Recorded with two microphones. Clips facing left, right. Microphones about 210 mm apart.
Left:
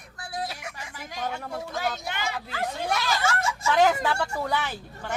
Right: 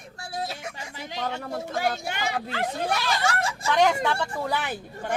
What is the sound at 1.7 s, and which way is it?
Speech, 50° right (ahead or behind).